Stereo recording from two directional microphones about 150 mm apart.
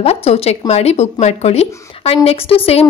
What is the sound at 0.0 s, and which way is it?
A woman's voice, 40° left (ahead or behind).